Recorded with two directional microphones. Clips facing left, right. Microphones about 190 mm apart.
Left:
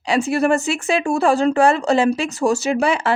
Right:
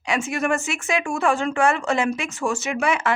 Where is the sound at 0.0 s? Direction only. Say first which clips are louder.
Left 6 dB; 35° left (ahead or behind).